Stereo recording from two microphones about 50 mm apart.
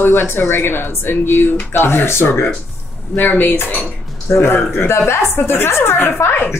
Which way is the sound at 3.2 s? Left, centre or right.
Left.